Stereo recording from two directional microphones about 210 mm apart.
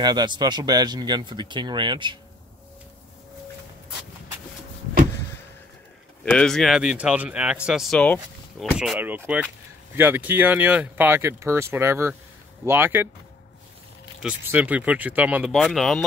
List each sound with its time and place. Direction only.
0.0 s speech: 20° right (ahead or behind)
6.2 s speech: 5° left (ahead or behind)
14.2 s speech: 10° right (ahead or behind)